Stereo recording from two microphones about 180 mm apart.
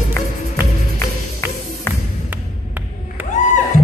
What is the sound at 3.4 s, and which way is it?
Music, 40° left (ahead or behind).